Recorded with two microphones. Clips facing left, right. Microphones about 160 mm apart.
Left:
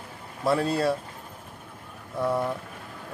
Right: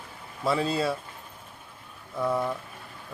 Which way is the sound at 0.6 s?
60° left (ahead or behind).